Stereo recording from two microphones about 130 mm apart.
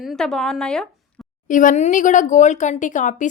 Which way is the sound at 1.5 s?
85° left.